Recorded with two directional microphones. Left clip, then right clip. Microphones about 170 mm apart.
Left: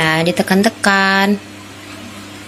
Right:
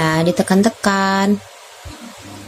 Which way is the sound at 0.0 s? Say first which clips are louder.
Left 2 dB; 25° right (ahead or behind).